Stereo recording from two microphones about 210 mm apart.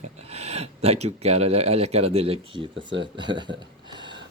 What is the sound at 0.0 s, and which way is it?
Speech, 30° right (ahead or behind).